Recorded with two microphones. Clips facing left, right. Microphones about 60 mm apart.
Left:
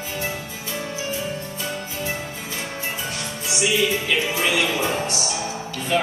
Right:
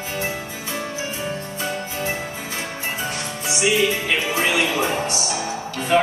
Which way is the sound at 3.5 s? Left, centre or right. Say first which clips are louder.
Right 2 dB; right.